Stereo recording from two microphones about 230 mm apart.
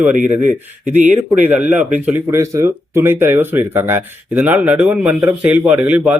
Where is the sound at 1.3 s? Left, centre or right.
Centre.